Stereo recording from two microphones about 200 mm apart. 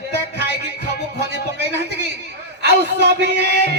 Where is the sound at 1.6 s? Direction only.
60° right (ahead or behind).